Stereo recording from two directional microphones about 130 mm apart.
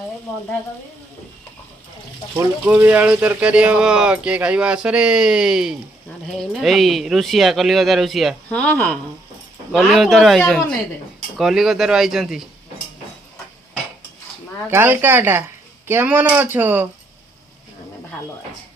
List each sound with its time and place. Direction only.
2.6 s speech: 15° right (ahead or behind)
8.4 s speech: 10° left (ahead or behind)
9.7 s speech: centre (ahead or behind)
14.7 s speech: 15° right (ahead or behind)